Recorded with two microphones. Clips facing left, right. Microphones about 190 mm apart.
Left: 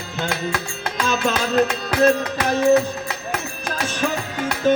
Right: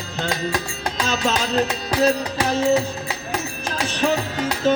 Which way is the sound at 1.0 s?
55° left (ahead or behind).